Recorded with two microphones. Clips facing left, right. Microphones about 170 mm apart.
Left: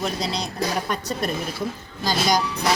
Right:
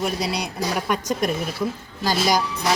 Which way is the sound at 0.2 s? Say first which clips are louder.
Right 1 dB; 10° right (ahead or behind).